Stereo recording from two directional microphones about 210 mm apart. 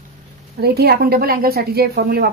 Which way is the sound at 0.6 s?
50° right (ahead or behind).